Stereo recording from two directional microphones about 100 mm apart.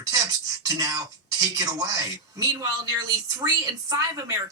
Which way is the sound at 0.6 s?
35° right (ahead or behind).